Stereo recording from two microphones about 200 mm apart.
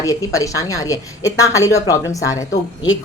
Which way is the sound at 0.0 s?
15° left (ahead or behind).